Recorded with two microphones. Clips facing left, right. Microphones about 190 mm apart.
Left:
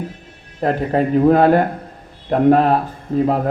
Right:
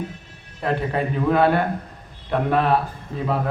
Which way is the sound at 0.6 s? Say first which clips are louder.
Left 6 dB; 40° left (ahead or behind).